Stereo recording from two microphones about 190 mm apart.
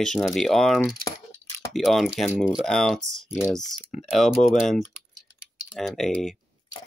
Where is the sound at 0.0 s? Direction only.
Centre (ahead or behind).